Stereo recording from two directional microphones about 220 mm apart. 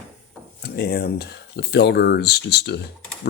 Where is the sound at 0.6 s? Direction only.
45° left (ahead or behind).